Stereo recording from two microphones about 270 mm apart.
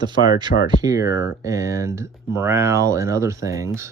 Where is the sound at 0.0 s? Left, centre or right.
Centre.